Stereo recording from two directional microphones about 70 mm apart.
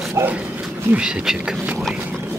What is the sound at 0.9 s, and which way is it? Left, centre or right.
Speech, centre.